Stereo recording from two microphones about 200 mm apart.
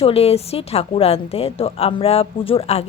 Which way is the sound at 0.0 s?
30° left (ahead or behind).